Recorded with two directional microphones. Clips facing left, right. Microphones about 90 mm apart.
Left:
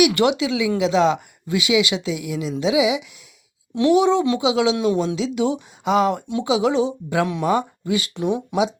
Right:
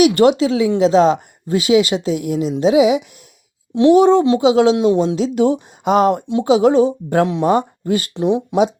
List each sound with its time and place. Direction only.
0.0 s speech: 40° right (ahead or behind)
6.4 s speech: 45° right (ahead or behind)
7.3 s speech: 35° right (ahead or behind)
8.1 s speech: 30° right (ahead or behind)